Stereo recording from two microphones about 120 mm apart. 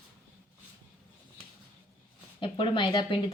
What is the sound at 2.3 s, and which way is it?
Speech, 45° left (ahead or behind).